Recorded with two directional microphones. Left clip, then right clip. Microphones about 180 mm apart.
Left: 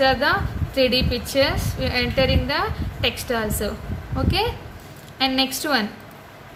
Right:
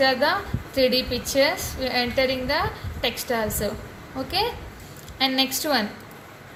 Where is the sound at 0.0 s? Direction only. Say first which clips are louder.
Left 2 dB; 35° left (ahead or behind).